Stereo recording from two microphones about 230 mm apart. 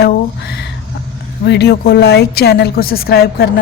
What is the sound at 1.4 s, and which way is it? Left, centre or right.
Mantra, left.